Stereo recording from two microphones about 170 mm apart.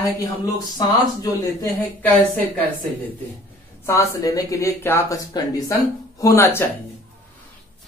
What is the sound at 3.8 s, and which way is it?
Speech, 15° left (ahead or behind).